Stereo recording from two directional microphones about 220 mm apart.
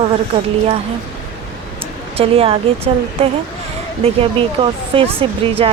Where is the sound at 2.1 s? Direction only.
25° right (ahead or behind).